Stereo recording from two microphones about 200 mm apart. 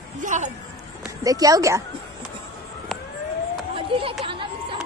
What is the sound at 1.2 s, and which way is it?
Speech, 15° right (ahead or behind).